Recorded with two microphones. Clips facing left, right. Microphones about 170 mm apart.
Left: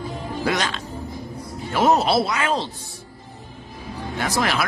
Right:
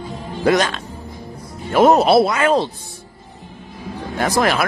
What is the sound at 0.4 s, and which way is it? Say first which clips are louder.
Speech: right 8 dB; 45° right (ahead or behind).